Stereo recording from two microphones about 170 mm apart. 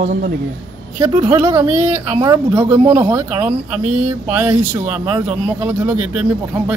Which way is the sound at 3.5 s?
40° right (ahead or behind).